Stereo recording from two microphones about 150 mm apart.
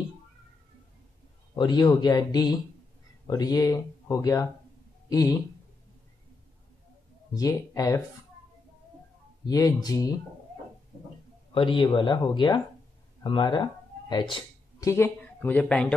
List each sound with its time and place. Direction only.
1.5 s speech: 30° left (ahead or behind)
7.3 s speech: 25° left (ahead or behind)
9.5 s speech: 25° left (ahead or behind)
11.5 s speech: 35° left (ahead or behind)
13.2 s a sound: 30° left (ahead or behind)
14.9 s speech: 15° left (ahead or behind)